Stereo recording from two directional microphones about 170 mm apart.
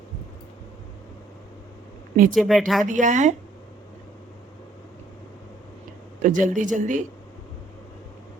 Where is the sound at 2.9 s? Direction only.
45° right (ahead or behind).